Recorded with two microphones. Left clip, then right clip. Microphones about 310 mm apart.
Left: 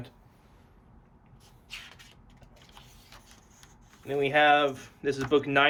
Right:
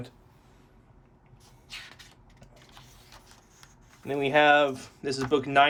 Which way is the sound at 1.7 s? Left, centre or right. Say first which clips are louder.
Right 1 dB; centre.